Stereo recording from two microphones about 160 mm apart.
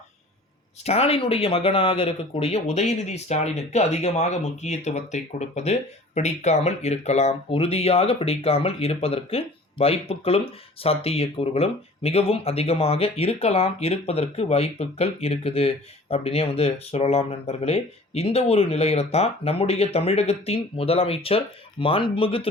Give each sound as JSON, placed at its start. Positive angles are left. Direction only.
{"t": 0.9, "sound": "speech", "side_deg": 40}